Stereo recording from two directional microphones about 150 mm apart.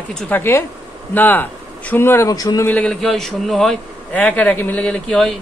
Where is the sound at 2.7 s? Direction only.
5° left (ahead or behind).